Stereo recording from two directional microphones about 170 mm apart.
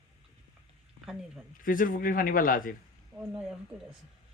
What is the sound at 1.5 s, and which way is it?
Speech, 55° left (ahead or behind).